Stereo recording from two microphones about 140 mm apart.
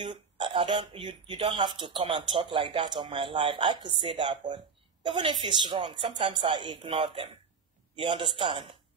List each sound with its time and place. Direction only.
0.0 s a man's voice: 35° right (ahead or behind)